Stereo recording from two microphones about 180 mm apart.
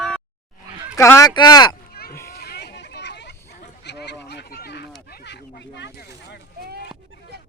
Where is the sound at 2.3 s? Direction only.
60° left (ahead or behind).